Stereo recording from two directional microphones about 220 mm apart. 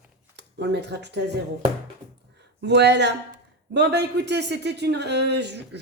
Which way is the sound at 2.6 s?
50° right (ahead or behind).